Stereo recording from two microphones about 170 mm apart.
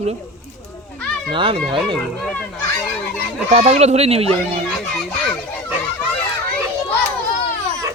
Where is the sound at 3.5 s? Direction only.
40° right (ahead or behind).